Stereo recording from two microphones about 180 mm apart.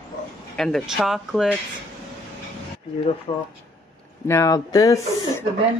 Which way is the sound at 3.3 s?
35° left (ahead or behind).